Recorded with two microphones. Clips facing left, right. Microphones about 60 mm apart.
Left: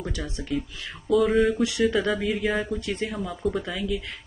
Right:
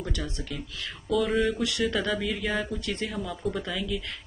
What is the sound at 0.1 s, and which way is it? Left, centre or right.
Speech, centre.